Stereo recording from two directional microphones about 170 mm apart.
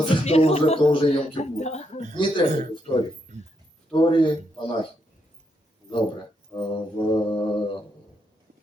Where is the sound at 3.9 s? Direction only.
30° left (ahead or behind).